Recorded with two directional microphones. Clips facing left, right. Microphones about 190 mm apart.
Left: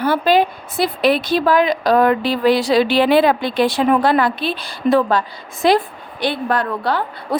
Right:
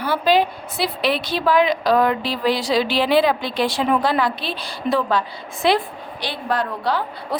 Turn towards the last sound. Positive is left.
turn(degrees=55)  # may be behind; listen again after turning